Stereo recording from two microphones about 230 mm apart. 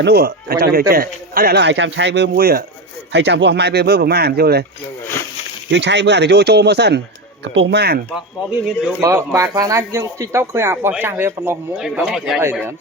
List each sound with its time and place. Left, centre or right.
0.0 s a man's voice: right
5.7 s a man's voice: right
9.0 s speech: centre